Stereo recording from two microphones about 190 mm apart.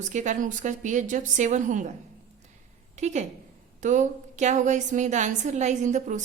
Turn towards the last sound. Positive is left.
turn(degrees=-40)  # may be behind; listen again after turning